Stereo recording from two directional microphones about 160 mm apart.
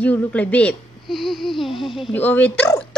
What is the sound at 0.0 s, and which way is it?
A woman's voice, 10° left (ahead or behind).